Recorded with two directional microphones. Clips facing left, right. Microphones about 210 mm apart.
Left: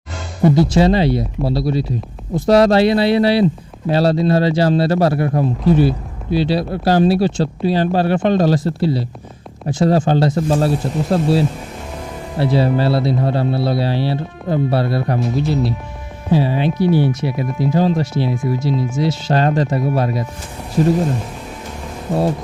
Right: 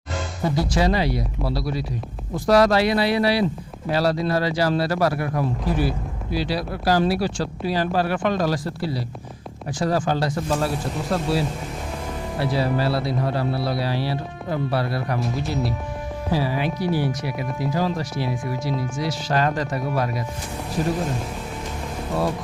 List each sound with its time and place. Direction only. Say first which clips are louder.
0.4 s speech: left 9 dB; 25° left (ahead or behind)
16.3 s speech: left 7 dB; 25° left (ahead or behind)